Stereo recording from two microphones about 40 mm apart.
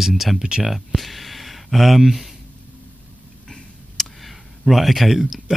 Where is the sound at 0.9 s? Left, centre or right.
Centre.